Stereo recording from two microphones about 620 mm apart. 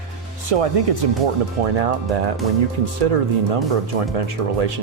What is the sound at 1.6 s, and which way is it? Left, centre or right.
Speech, right.